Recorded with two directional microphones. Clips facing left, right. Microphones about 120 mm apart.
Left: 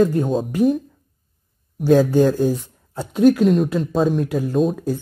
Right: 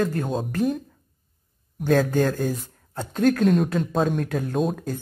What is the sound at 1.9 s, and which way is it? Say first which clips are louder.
Speech: left 6 dB; 10° left (ahead or behind).